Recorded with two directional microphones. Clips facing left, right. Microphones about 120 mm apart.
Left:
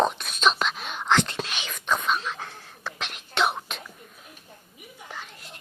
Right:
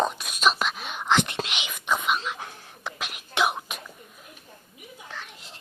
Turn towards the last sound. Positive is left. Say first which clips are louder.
# even
turn(degrees=10)  # may be behind; listen again after turning